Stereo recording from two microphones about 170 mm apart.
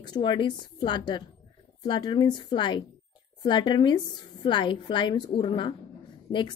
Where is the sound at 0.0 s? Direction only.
25° left (ahead or behind).